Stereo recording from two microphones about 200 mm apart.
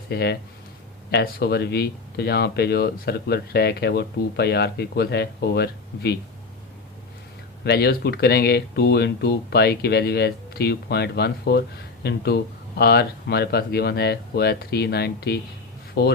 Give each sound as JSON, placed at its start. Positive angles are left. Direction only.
{"t": 0.1, "sound": "speech", "side_deg": 55}
{"t": 7.6, "sound": "speech", "side_deg": 55}